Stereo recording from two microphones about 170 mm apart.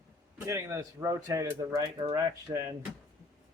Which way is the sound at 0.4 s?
15° right (ahead or behind).